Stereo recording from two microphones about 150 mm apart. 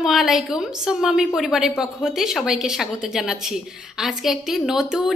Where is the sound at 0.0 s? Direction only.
Centre (ahead or behind).